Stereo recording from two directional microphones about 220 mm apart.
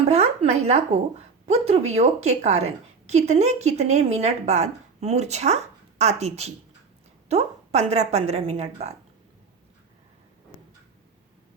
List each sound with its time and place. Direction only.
0.0 s a woman's voice: 30° right (ahead or behind)